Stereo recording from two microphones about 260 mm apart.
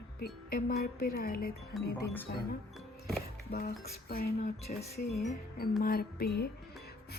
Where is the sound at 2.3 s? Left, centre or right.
Left.